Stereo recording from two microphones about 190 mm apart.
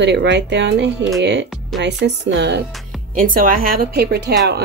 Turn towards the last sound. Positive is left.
turn(degrees=-60)  # may be behind; listen again after turning